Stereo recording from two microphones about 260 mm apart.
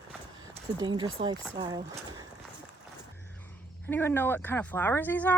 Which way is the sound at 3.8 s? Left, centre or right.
Centre.